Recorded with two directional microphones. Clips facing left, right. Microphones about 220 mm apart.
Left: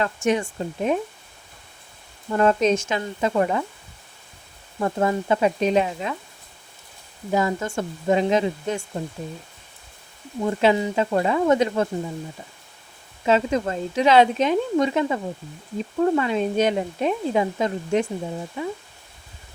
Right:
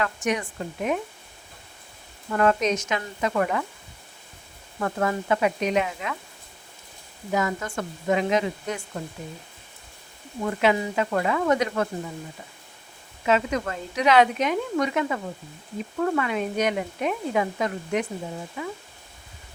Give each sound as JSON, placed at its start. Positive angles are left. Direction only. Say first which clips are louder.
{"t": 0.0, "sound": "speech", "louder": "left 4 dB", "side_deg": 30}
{"t": 2.3, "sound": "speech", "louder": "left 3 dB", "side_deg": 30}
{"t": 4.8, "sound": "speech", "louder": "left 3 dB", "side_deg": 25}
{"t": 7.3, "sound": "speech", "louder": "left 3 dB", "side_deg": 30}
{"t": 10.4, "sound": "speech", "louder": "left 3 dB", "side_deg": 25}
{"t": 13.2, "sound": "speech", "louder": "left 3 dB", "side_deg": 30}